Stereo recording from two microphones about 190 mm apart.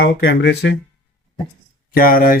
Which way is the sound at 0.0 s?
60° left (ahead or behind).